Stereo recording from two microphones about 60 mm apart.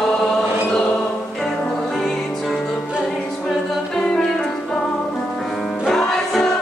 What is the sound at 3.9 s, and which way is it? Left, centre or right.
Music, centre.